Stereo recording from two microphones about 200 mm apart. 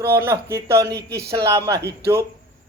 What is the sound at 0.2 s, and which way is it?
A man's voice, 15° right (ahead or behind).